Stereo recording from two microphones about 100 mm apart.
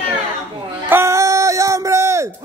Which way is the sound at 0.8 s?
25° right (ahead or behind).